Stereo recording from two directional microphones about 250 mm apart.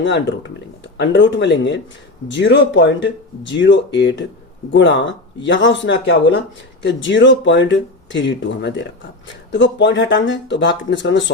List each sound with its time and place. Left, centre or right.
0.0 s speech: left